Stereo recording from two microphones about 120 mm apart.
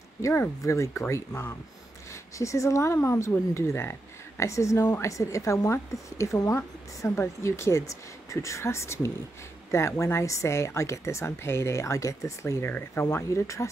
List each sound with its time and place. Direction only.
0.2 s a woman's voice: 25° left (ahead or behind)